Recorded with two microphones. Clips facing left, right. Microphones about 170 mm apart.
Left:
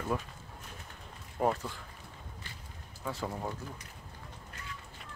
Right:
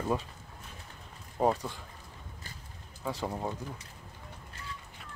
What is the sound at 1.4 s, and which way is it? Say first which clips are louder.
Speech: right 3 dB; 25° right (ahead or behind).